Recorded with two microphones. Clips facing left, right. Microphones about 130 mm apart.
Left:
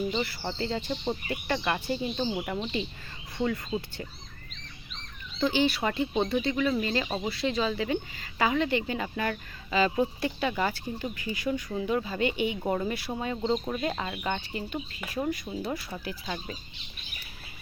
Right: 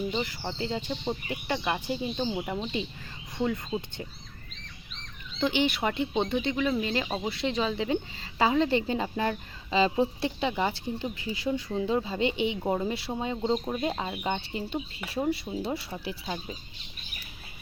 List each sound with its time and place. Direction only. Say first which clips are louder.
0.1 s speech: left 1 dB; 15° right (ahead or behind)
3.3 s a woman's voice: even; 20° right (ahead or behind)
5.4 s a woman's voice: left 1 dB; 20° right (ahead or behind)
12.5 s speech: right 1 dB; 10° right (ahead or behind)
12.9 s a woman's voice: right 1 dB; 25° right (ahead or behind)
13.3 s a woman's voice: even; 10° right (ahead or behind); by 15.2 s 30° right (ahead or behind)
15.5 s speech: right 1 dB; 10° right (ahead or behind)